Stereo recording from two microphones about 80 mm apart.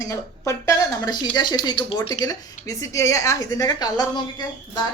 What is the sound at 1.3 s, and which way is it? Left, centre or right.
Speech, left.